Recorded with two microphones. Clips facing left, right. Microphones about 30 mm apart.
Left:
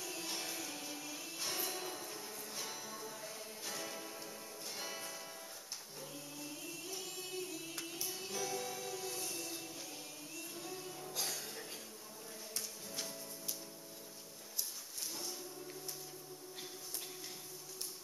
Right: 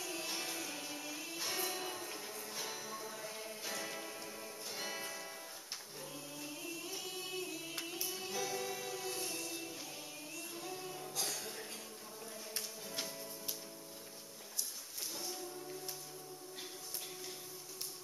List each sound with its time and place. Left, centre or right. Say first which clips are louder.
0.0 s music: right 2 dB; centre
6.4 s singing: right 3 dB; centre
9.2 s music: right 2 dB; centre
10.5 s music: right 2 dB; centre